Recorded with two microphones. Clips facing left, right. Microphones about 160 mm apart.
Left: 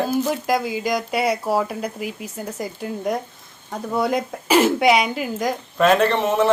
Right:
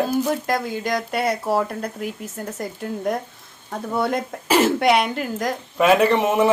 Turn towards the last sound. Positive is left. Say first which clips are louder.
# right 1 dB
turn(degrees=-10)  # may be behind; listen again after turning